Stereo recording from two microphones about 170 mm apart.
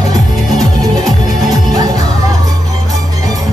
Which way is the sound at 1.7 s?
20° right (ahead or behind).